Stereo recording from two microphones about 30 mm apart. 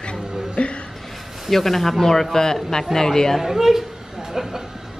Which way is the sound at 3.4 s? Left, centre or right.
Centre.